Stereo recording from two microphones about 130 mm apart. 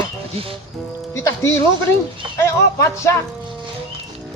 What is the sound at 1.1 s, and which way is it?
Speech, 20° left (ahead or behind).